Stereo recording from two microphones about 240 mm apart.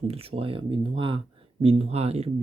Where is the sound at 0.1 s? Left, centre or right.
Right.